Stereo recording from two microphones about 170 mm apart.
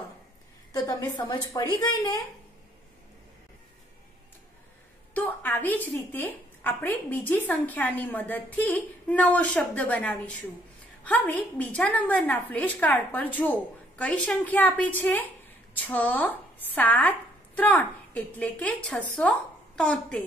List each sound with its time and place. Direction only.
0.7 s a woman's voice: 20° left (ahead or behind)
5.1 s a woman's voice: 10° left (ahead or behind)